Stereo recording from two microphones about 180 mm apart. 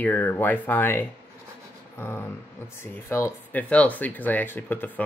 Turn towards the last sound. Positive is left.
turn(degrees=10)  # may be behind; listen again after turning